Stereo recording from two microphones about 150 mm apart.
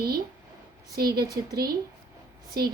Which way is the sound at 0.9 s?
90° right.